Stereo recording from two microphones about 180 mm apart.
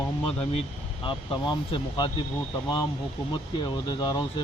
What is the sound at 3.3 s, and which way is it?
Speech, 25° left (ahead or behind).